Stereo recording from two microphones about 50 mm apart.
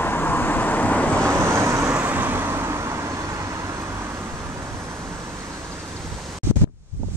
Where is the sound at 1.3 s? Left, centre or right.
Right.